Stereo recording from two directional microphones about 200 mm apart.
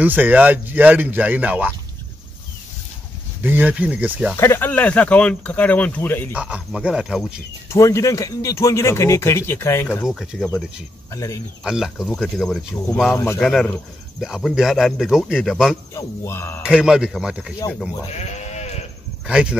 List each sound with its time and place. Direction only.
0.0 s speech: 10° right (ahead or behind)
3.4 s speech: 10° right (ahead or behind)
4.4 s speech: 10° left (ahead or behind)
6.3 s speech: 5° right (ahead or behind)
7.7 s speech: 15° left (ahead or behind)
10.0 s speech: centre (ahead or behind)
11.1 s speech: 15° left (ahead or behind)
11.6 s speech: 5° right (ahead or behind)
13.1 s speech: 10° left (ahead or behind)
15.9 s speech: 15° left (ahead or behind)
16.6 s speech: 5° right (ahead or behind)
18.1 s speech: 35° left (ahead or behind)
19.2 s speech: 5° right (ahead or behind)